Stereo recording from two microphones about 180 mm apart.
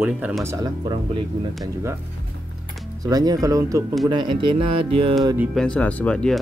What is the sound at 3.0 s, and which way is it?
Speech, 20° right (ahead or behind).